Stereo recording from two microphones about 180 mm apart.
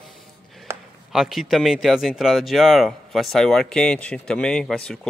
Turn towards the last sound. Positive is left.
turn(degrees=5)  # may be behind; listen again after turning